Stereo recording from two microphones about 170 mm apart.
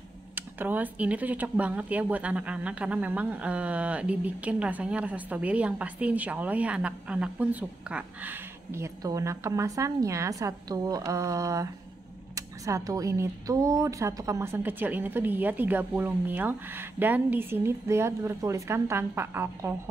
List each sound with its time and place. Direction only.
0.4 s a woman's voice: 10° right (ahead or behind)